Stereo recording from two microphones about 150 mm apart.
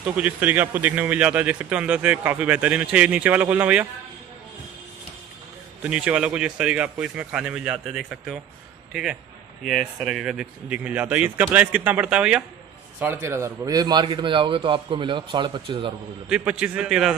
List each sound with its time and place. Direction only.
0.1 s speech: 10° right (ahead or behind)
5.8 s speech: 5° right (ahead or behind)
9.7 s a man's voice: centre (ahead or behind); by 15.9 s 35° right (ahead or behind)
16.3 s speech: 5° right (ahead or behind)